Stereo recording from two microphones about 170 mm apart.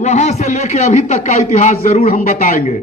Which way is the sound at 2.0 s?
55° left (ahead or behind).